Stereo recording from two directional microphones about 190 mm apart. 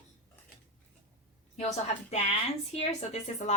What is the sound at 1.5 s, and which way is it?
Speech, 35° left (ahead or behind).